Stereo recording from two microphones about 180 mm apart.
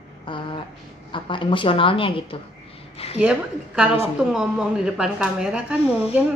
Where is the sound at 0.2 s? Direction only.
30° left (ahead or behind).